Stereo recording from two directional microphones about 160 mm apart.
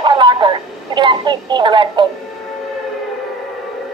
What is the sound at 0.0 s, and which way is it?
Radio, 30° right (ahead or behind).